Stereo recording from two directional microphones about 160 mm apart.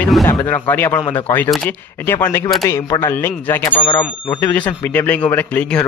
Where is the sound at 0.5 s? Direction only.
10° left (ahead or behind).